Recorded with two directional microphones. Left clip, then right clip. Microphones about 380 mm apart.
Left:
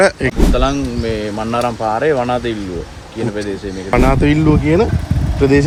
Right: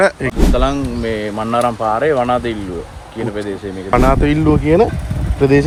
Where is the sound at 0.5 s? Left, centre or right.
Centre.